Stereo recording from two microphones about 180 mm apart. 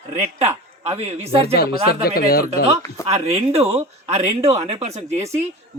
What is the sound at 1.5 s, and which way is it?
Speech, 60° left (ahead or behind).